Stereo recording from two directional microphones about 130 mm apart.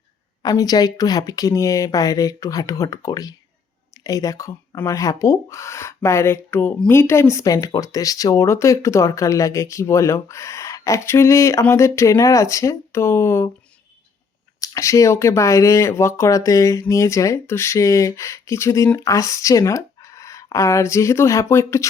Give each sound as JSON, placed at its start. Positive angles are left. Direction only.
{"t": 0.4, "sound": "speech", "side_deg": 30}
{"t": 14.6, "sound": "speech", "side_deg": 25}